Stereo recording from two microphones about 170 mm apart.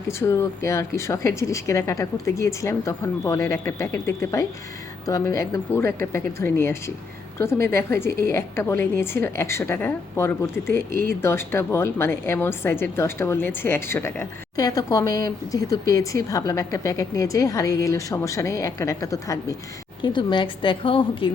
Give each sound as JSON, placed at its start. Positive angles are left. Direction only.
{"t": 0.1, "sound": "a woman's voice", "side_deg": 15}